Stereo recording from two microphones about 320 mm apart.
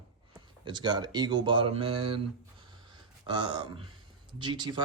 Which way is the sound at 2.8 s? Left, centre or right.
Centre.